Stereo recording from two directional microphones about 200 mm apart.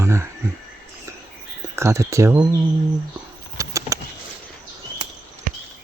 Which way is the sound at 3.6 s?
15° right (ahead or behind).